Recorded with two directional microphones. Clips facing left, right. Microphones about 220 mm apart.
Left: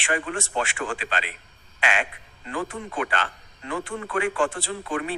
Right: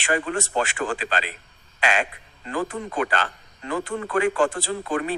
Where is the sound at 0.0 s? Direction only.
40° right (ahead or behind).